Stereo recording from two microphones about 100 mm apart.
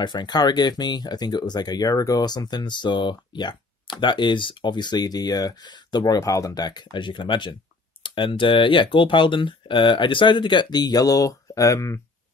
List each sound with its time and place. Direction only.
0.0 s speech: 45° left (ahead or behind)
6.1 s speech: 35° left (ahead or behind)